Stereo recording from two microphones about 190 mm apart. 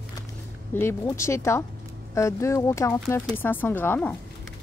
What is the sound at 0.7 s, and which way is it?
Speech, 15° left (ahead or behind).